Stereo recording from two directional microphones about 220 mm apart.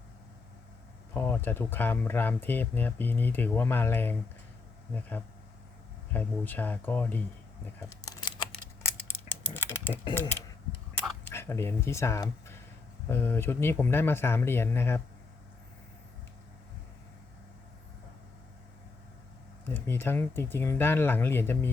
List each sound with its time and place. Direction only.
1.1 s speech: 10° left (ahead or behind)
6.1 s speech: 10° left (ahead or behind)
7.9 s a sound: 15° left (ahead or behind)
9.3 s typing: 10° left (ahead or behind)
10.2 s speech: 10° left (ahead or behind)
19.6 s speech: 10° left (ahead or behind)